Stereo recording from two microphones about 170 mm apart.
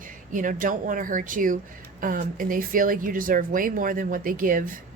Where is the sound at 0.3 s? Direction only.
50° right (ahead or behind).